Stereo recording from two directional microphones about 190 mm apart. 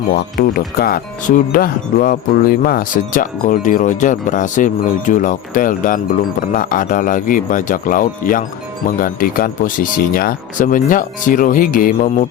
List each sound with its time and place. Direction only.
0.1 s speech: 50° left (ahead or behind)